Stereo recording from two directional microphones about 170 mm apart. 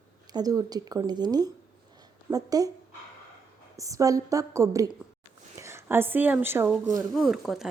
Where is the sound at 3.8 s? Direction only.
20° right (ahead or behind).